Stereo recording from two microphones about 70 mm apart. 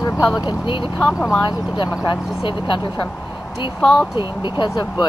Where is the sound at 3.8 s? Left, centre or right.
Centre.